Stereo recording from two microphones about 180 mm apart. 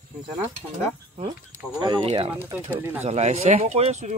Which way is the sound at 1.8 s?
30° right (ahead or behind).